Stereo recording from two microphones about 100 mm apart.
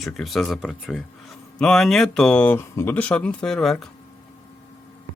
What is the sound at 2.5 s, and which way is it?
Speech, 25° left (ahead or behind).